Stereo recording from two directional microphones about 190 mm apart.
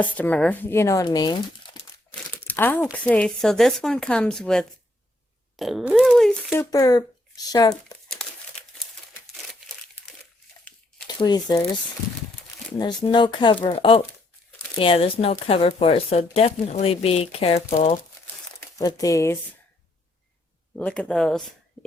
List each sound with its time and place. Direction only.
0.0 s speech: 10° left (ahead or behind)
2.5 s speech: 10° left (ahead or behind)
6.6 s speech: 20° left (ahead or behind)
8.0 s crumpling: 5° left (ahead or behind)
11.2 s speech: 20° left (ahead or behind)
12.8 s a woman's voice: 25° left (ahead or behind)
18.8 s speech: 20° left (ahead or behind)
20.7 s speech: 5° left (ahead or behind)